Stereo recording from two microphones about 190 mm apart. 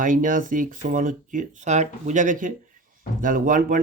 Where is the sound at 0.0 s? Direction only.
45° right (ahead or behind).